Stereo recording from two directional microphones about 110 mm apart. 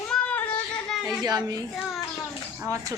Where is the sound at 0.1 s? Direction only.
10° left (ahead or behind).